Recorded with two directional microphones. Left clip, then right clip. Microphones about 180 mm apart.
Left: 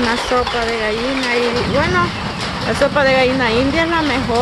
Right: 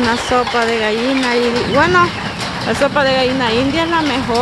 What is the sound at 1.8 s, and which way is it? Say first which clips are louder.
Speech: right 6 dB; 25° right (ahead or behind).